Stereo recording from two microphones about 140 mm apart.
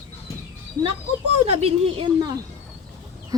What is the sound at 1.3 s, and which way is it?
Speech, 50° right (ahead or behind).